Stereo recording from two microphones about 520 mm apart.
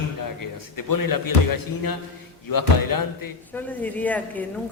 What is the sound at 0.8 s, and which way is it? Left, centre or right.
Speech, left.